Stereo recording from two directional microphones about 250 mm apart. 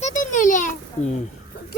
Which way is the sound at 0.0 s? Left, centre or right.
Left.